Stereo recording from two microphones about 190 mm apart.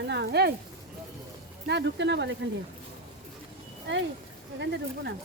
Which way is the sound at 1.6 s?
65° right (ahead or behind).